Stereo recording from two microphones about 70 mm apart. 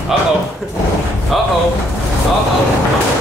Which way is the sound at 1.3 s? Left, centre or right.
Centre.